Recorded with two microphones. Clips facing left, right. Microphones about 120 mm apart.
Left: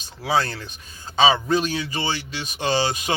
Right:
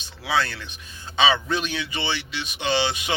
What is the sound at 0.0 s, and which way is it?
Speech, 40° left (ahead or behind).